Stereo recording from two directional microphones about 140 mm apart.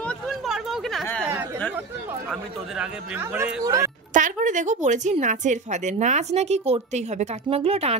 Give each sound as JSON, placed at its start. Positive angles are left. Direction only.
{"t": 0.3, "sound": "a sound", "side_deg": 0}
{"t": 2.8, "sound": "speech", "side_deg": -10}
{"t": 3.6, "sound": "a woman's voice", "side_deg": -25}
{"t": 4.1, "sound": "a woman's voice", "side_deg": -65}
{"t": 7.4, "sound": "speech", "side_deg": -45}